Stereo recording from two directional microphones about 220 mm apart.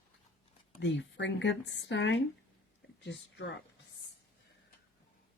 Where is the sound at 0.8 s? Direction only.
55° left (ahead or behind).